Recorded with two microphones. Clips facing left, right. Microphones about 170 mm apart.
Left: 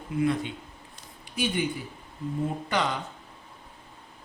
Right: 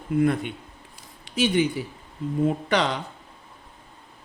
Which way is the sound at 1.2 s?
90° right.